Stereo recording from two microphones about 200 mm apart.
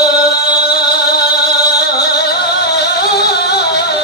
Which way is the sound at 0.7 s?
50° left (ahead or behind).